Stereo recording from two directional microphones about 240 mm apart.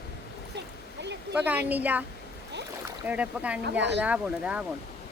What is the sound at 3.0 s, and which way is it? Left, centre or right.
Speech, centre.